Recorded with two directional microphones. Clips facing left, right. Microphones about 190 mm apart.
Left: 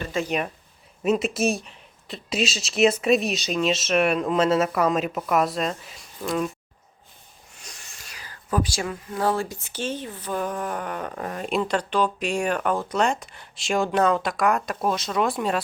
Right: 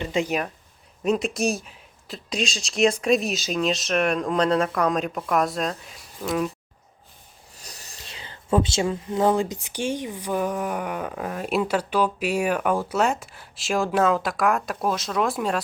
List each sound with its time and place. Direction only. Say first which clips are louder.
0.0 s speech: right 2 dB; 15° right (ahead or behind)
1.0 s speech: left 1 dB; 5° left (ahead or behind)
7.5 s a sound: right 2 dB; 35° right (ahead or behind)
7.9 s speech: right 3 dB; 25° right (ahead or behind); by 15.6 s centre (ahead or behind)